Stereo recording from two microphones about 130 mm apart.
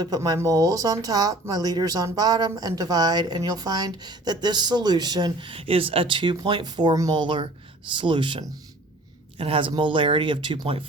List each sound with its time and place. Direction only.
0.0 s speech: 30° right (ahead or behind)